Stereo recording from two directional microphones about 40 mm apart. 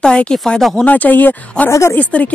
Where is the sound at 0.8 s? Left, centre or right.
Left.